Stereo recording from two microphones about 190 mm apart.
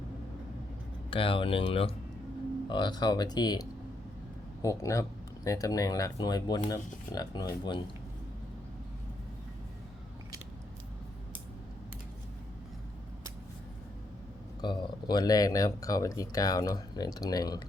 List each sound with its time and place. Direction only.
1.1 s speech: 30° left (ahead or behind)
14.6 s speech: 20° left (ahead or behind)